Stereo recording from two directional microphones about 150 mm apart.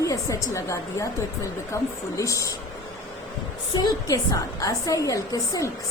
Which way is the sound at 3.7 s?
25° left (ahead or behind).